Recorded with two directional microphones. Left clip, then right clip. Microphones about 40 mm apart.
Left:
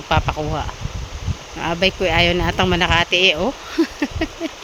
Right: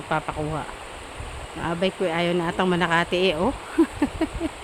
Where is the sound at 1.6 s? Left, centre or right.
Left.